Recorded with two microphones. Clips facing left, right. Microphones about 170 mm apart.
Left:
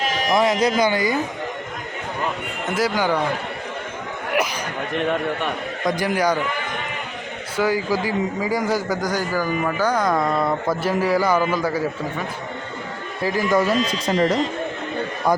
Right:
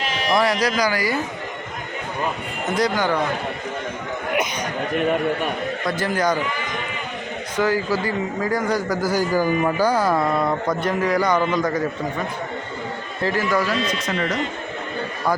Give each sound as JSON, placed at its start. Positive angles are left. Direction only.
{"t": 0.0, "sound": "sheep", "side_deg": 40}
{"t": 0.3, "sound": "a man's voice", "side_deg": 20}
{"t": 2.6, "sound": "speech", "side_deg": 5}
{"t": 5.8, "sound": "speech", "side_deg": 15}
{"t": 7.5, "sound": "a man's voice", "side_deg": 10}
{"t": 13.2, "sound": "a man's voice", "side_deg": 15}
{"t": 13.9, "sound": "speech", "side_deg": 35}